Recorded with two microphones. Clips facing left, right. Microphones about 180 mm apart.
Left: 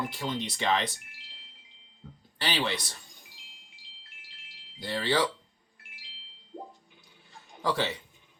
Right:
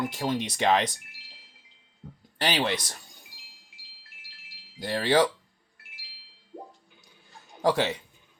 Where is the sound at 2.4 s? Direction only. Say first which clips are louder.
Right 4 dB; 45° right (ahead or behind).